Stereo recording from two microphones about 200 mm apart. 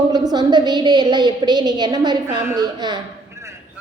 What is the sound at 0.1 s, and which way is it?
A woman's voice, 20° right (ahead or behind).